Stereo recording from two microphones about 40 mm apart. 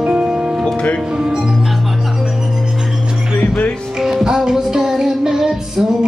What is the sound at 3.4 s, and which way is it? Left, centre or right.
Music, left.